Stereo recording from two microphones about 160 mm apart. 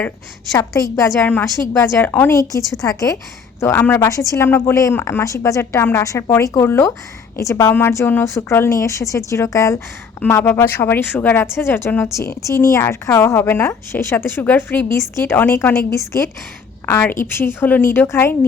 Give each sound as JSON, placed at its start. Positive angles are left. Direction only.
{"t": 0.5, "sound": "a woman's voice", "side_deg": 20}